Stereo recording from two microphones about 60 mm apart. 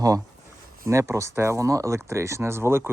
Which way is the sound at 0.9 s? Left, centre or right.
Right.